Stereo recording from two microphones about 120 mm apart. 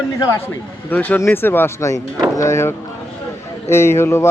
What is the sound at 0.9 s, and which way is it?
A man's voice, 15° left (ahead or behind).